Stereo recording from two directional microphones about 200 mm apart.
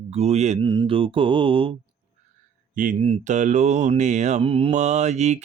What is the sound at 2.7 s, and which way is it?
Speech, 40° right (ahead or behind).